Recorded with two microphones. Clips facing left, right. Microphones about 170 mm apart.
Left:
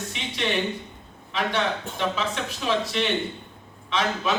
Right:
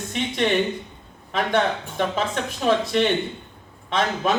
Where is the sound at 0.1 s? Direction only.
50° right (ahead or behind).